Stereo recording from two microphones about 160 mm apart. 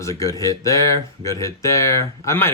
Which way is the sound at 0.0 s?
20° left (ahead or behind).